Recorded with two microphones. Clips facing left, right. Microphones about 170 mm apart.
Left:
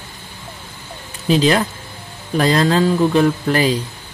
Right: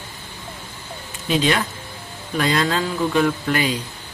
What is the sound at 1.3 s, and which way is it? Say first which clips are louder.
Speech: left 5 dB; 35° left (ahead or behind).